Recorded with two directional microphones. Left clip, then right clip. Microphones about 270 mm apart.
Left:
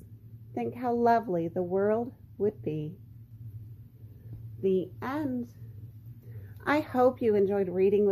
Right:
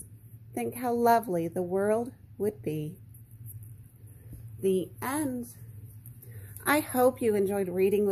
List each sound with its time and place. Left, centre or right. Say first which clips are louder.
0.6 s speech: even; centre
4.6 s a woman's voice: even; centre
6.6 s speech: even; centre